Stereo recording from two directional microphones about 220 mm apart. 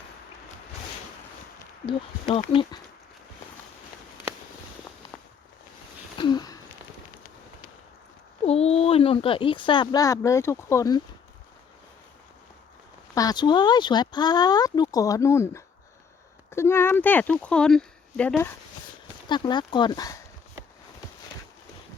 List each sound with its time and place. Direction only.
2.2 s speech: 30° left (ahead or behind)
6.1 s a sound: 20° left (ahead or behind)
8.4 s speech: 30° left (ahead or behind)
13.1 s speech: 20° left (ahead or behind)
19.3 s speech: 20° left (ahead or behind)